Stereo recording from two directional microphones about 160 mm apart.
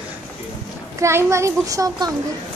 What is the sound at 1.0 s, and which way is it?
A child's voice, 20° right (ahead or behind).